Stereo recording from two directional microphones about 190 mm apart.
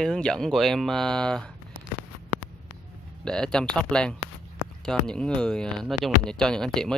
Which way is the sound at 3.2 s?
5° left (ahead or behind).